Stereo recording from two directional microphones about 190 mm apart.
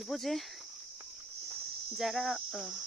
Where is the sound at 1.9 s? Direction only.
Centre (ahead or behind).